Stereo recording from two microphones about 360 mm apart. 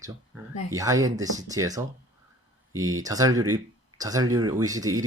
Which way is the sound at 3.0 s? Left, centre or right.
Centre.